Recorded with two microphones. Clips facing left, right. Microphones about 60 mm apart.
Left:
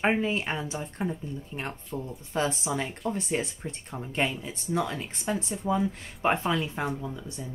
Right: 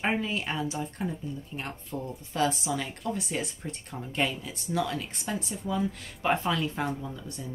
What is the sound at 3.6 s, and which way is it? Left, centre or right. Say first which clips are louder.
Speech: left 1 dB; centre.